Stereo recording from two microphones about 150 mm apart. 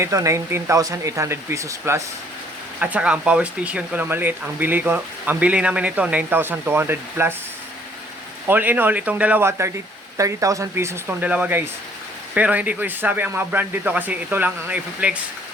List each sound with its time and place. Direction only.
0.0 s speech: 20° right (ahead or behind)
2.8 s speech: 10° right (ahead or behind)
8.4 s speech: 10° right (ahead or behind)